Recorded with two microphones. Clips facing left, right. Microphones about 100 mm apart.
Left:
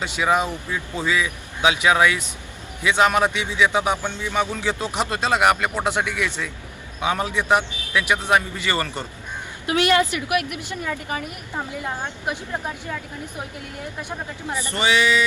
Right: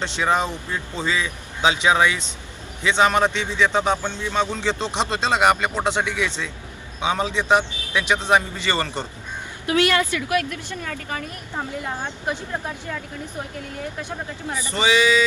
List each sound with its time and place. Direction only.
0.0 s speech: 5° left (ahead or behind)
9.6 s speech: 25° left (ahead or behind)
14.7 s speech: 15° right (ahead or behind)